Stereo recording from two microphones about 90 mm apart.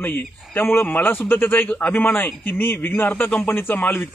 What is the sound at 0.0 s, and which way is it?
A man's voice, 20° left (ahead or behind).